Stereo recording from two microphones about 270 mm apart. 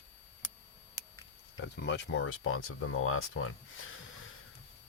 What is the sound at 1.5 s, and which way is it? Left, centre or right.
Speech, left.